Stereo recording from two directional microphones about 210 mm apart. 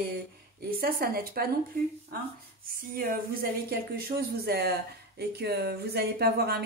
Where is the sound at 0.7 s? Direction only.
45° right (ahead or behind).